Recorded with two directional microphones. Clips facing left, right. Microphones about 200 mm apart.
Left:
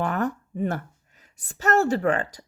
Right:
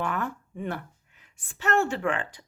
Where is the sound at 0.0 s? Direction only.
40° left (ahead or behind).